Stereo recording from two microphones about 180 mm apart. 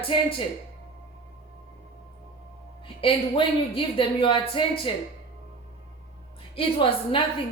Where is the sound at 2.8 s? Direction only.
30° left (ahead or behind).